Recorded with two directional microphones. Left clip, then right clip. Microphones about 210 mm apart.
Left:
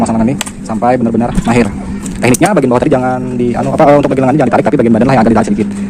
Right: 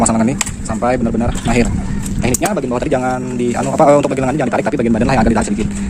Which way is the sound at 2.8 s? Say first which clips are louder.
Left 5 dB; 10° left (ahead or behind).